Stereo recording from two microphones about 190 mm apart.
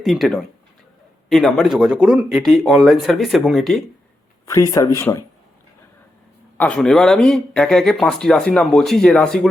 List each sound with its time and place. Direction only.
0.0 s speech: centre (ahead or behind)
4.4 s speech: 15° left (ahead or behind)
6.6 s speech: 5° left (ahead or behind)